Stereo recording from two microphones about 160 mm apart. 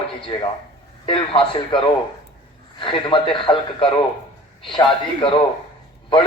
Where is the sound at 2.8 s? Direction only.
30° left (ahead or behind).